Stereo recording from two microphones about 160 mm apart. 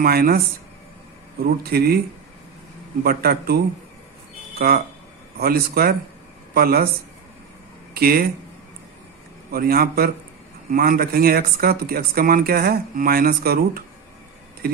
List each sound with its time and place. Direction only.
0.0 s speech: 70° right (ahead or behind)
1.7 s speech: 75° right (ahead or behind)
3.0 s speech: 75° right (ahead or behind)
7.9 s speech: 70° right (ahead or behind)
9.5 s speech: 70° right (ahead or behind)